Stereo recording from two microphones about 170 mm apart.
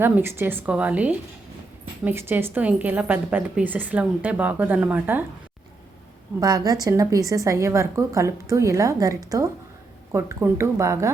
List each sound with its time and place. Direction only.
0.0 s a woman's voice: 15° right (ahead or behind)
6.7 s a woman's voice: 20° right (ahead or behind)